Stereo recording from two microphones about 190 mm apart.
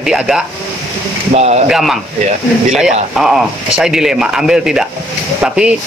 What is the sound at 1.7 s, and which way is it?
Speech, centre (ahead or behind).